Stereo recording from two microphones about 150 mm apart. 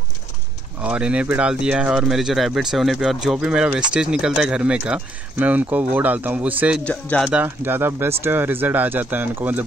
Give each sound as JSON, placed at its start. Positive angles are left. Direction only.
{"t": 0.8, "sound": "speech", "side_deg": -10}
{"t": 6.8, "sound": "speech", "side_deg": 10}
{"t": 7.2, "sound": "speech", "side_deg": -10}